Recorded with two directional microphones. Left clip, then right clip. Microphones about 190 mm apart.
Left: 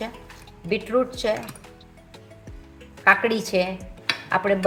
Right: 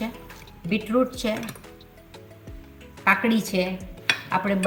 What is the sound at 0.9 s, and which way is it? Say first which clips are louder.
Speech: left 1 dB; 35° left (ahead or behind).